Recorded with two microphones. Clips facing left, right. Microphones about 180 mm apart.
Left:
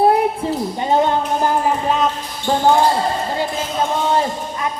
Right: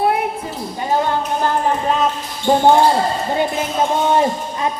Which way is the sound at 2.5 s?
20° right (ahead or behind).